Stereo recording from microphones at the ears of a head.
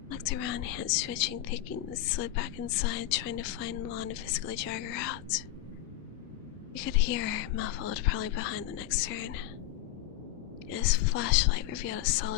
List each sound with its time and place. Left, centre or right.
0.1 s a woman's voice: left
6.7 s a woman's voice: left
10.7 s a woman's voice: left